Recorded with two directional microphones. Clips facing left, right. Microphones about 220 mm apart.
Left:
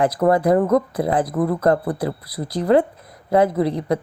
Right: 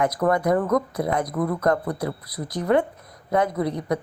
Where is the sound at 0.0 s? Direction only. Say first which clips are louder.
Left 4 dB; 30° left (ahead or behind).